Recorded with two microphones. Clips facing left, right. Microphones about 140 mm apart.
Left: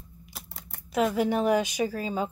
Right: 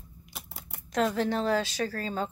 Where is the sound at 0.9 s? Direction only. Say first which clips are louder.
Left 2 dB; 10° left (ahead or behind).